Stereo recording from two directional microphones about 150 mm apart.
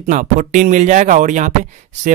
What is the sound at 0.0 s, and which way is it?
Speech, 60° right (ahead or behind).